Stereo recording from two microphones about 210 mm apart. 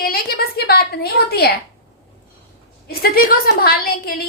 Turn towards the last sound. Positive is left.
turn(degrees=45)  # may be behind; listen again after turning